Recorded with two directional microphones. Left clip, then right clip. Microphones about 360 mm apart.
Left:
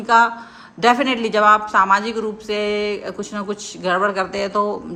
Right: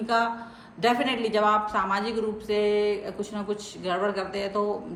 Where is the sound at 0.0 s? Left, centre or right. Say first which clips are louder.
Left 10 dB; left.